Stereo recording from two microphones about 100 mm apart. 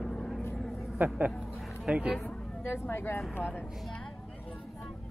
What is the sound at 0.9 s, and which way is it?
Speech, 15° right (ahead or behind).